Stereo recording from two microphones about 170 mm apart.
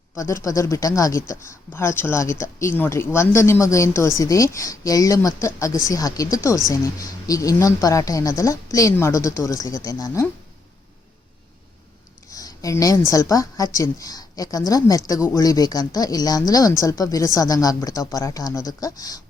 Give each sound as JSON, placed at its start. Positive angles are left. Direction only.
{"t": 0.2, "sound": "a woman's voice", "side_deg": 20}
{"t": 12.3, "sound": "a sound", "side_deg": 20}
{"t": 13.1, "sound": "a woman's voice", "side_deg": 20}